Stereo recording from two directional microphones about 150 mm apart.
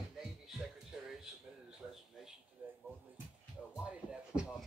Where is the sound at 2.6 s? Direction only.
15° right (ahead or behind).